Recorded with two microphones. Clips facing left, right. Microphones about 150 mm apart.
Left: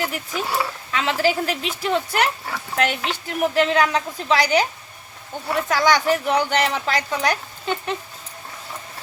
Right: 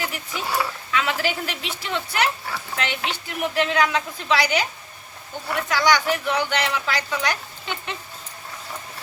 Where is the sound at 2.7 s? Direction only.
40° left (ahead or behind).